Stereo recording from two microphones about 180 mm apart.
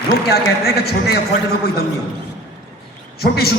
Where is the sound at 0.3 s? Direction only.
60° left (ahead or behind).